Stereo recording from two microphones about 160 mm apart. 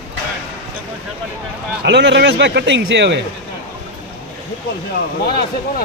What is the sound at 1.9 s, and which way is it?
A man's voice, 90° right.